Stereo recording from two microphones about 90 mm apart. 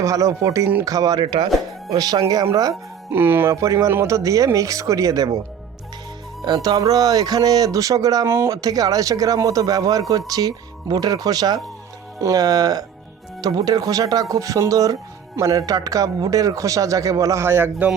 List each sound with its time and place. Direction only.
0.0 s a man's voice: 35° right (ahead or behind)
1.2 s speech: 70° right (ahead or behind)
1.9 s a man's voice: 45° right (ahead or behind)
3.1 s speech: 25° right (ahead or behind)
3.5 s a man's voice: 35° right (ahead or behind)
6.4 s a man's voice: 50° right (ahead or behind)
8.3 s speech: 30° right (ahead or behind)
8.6 s a man's voice: 45° right (ahead or behind); by 17.8 s 25° right (ahead or behind)